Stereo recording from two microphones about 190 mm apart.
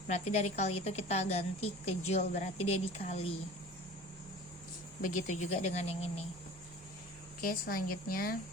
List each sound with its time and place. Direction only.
0.1 s a woman's voice: 35° left (ahead or behind)
5.0 s a woman's voice: 40° left (ahead or behind)
7.4 s speech: 50° left (ahead or behind)